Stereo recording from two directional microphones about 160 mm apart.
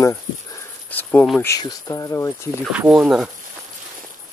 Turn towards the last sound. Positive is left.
turn(degrees=-5)  # may be behind; listen again after turning